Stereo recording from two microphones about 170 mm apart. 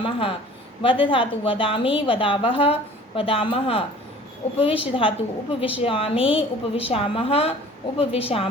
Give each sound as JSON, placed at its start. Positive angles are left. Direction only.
{"t": 0.0, "sound": "a woman's voice", "side_deg": 30}